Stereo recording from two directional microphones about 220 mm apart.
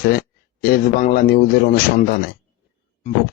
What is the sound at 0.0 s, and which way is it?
A man's voice, 40° left (ahead or behind).